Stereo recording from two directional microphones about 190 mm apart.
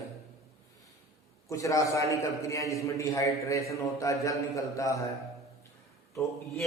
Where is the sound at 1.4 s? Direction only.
15° left (ahead or behind).